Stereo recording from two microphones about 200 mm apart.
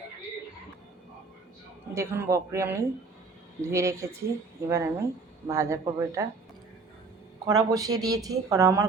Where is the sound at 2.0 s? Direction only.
15° right (ahead or behind).